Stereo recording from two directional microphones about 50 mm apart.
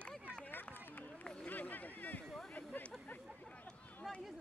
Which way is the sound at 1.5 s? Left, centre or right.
Left.